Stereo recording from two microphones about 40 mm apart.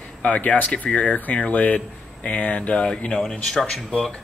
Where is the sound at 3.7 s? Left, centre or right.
Centre.